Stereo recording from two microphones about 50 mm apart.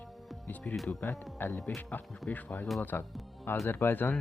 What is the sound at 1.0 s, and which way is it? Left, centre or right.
Speech, left.